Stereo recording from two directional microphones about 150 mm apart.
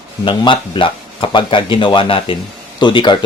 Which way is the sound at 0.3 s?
35° left (ahead or behind).